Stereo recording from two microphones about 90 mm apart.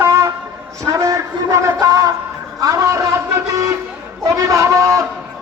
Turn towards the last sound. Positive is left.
turn(degrees=-35)  # may be behind; listen again after turning